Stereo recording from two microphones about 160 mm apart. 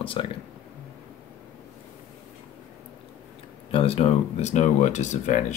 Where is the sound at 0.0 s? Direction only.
35° left (ahead or behind).